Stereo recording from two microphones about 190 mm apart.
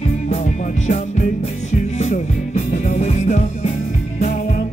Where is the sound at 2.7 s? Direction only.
40° left (ahead or behind).